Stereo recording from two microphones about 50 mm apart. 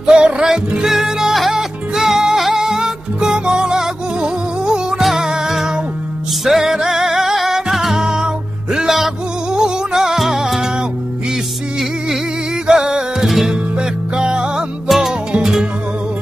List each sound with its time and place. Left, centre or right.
0.0 s music: centre
12.6 s music: centre
14.9 s music: centre